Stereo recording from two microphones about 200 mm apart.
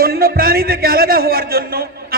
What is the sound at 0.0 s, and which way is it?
A man's voice, 50° right (ahead or behind).